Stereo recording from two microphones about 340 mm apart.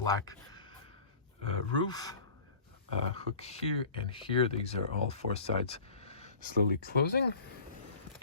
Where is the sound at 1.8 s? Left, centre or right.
Centre.